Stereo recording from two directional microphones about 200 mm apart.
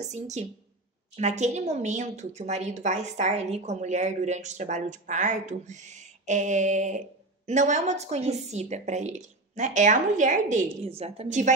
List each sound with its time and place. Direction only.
0.0 s a woman's voice: 35° right (ahead or behind)